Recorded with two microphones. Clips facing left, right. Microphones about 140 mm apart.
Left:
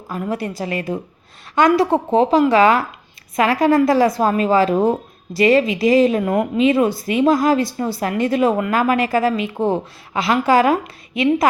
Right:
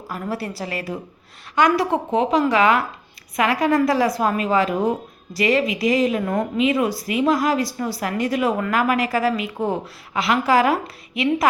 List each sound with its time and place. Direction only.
0.1 s a woman's voice: 20° left (ahead or behind)